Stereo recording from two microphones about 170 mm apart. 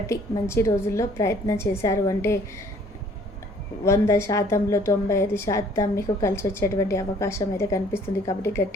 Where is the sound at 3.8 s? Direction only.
15° left (ahead or behind).